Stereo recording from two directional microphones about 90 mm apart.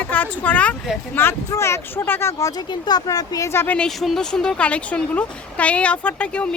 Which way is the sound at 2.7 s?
50° left (ahead or behind).